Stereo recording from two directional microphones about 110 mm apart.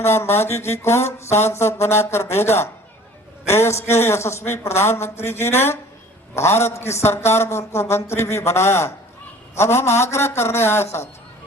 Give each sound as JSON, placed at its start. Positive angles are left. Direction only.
{"t": 0.0, "sound": "a man's voice", "side_deg": 25}